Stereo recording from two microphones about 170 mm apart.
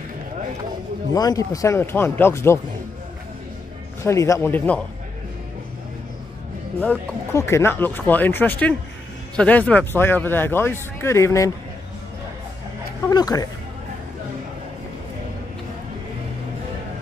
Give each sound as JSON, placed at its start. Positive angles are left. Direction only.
{"t": 1.1, "sound": "speech", "side_deg": 20}
{"t": 4.0, "sound": "speech", "side_deg": 15}
{"t": 6.8, "sound": "speech", "side_deg": 15}
{"t": 13.1, "sound": "speech", "side_deg": 25}